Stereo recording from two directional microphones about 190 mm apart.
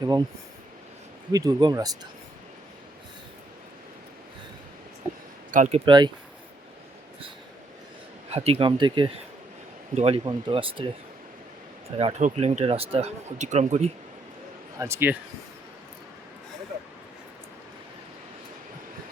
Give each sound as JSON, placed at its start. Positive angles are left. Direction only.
{"t": 0.0, "sound": "speech", "side_deg": -20}
{"t": 1.3, "sound": "speech", "side_deg": -20}
{"t": 5.5, "sound": "speech", "side_deg": -40}
{"t": 8.3, "sound": "speech", "side_deg": -30}
{"t": 11.9, "sound": "speech", "side_deg": -35}
{"t": 14.8, "sound": "speech", "side_deg": -15}